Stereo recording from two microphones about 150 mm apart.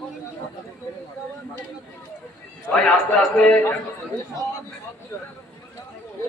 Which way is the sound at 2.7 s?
5° left (ahead or behind).